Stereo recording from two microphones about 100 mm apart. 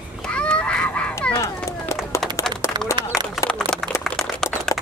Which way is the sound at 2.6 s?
30° left (ahead or behind).